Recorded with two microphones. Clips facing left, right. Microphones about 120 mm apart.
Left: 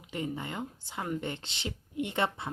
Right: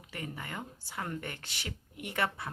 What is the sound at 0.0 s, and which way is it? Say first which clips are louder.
A woman's voice: left 6 dB; 20° left (ahead or behind).